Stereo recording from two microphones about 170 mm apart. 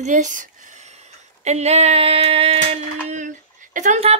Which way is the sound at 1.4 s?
40° right (ahead or behind).